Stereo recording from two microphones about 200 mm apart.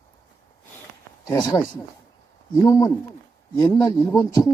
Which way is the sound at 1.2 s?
15° left (ahead or behind).